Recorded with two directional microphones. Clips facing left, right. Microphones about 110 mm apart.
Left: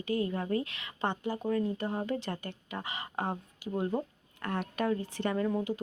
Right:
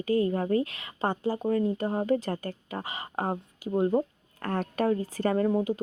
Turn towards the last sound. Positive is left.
turn(degrees=-30)  # may be behind; listen again after turning